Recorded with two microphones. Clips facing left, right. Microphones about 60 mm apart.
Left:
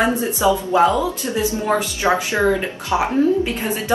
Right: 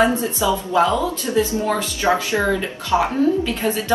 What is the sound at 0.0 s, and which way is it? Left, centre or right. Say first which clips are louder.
A woman's voice: even; left.